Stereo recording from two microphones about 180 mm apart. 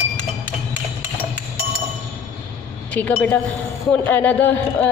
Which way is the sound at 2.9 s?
10° left (ahead or behind).